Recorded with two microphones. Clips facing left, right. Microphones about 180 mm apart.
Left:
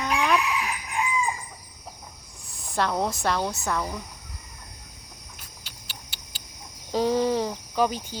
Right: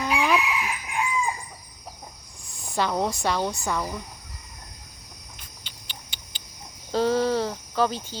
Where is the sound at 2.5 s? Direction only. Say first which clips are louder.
Even; centre (ahead or behind).